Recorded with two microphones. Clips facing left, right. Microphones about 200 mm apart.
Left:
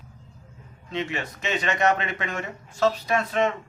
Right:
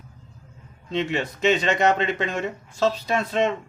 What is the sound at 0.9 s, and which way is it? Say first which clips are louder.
Speech: right 5 dB; 30° right (ahead or behind).